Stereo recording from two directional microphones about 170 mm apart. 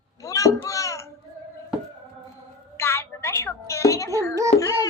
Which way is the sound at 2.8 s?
15° left (ahead or behind).